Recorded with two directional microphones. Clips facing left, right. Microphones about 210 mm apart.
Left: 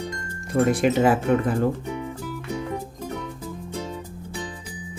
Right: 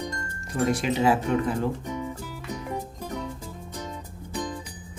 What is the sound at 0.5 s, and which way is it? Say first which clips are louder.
Speech: left 5 dB; 50° left (ahead or behind).